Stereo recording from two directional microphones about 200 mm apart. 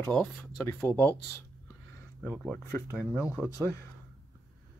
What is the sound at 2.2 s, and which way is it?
Speech, 10° right (ahead or behind).